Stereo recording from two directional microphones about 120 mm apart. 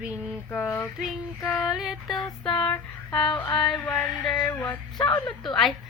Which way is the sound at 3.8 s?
15° left (ahead or behind).